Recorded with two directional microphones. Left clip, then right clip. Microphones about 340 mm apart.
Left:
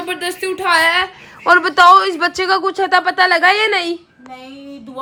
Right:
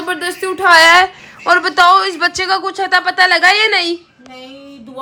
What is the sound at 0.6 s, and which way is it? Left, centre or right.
Speech, right.